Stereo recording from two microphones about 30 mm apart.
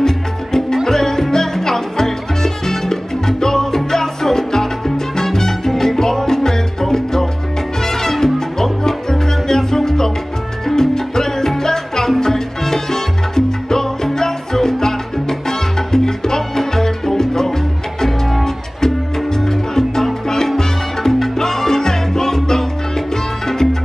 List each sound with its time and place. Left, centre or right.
0.0 s music: centre
7.8 s salsa music: centre
8.8 s music: centre
12.2 s salsa music: centre
18.0 s music: centre
20.2 s salsa music: centre